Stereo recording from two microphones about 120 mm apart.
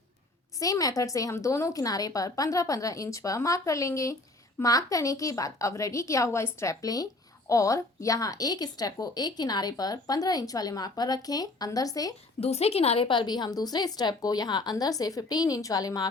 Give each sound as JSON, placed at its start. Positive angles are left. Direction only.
{"t": 0.6, "sound": "a woman's voice", "side_deg": 30}
{"t": 12.4, "sound": "a woman's voice", "side_deg": 60}